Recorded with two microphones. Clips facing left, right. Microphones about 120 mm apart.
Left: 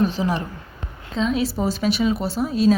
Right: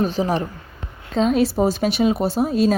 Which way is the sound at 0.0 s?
45° right (ahead or behind).